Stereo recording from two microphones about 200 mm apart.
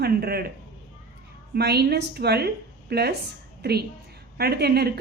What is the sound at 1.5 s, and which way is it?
A woman's voice, 55° right (ahead or behind).